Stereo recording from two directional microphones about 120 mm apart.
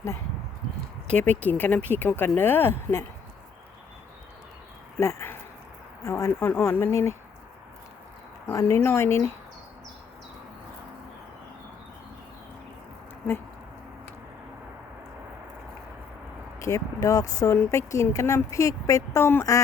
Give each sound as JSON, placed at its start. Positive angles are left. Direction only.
{"t": 1.4, "sound": "speech", "side_deg": 15}
{"t": 4.9, "sound": "speech", "side_deg": 20}
{"t": 8.4, "sound": "speech", "side_deg": 25}
{"t": 16.6, "sound": "speech", "side_deg": 30}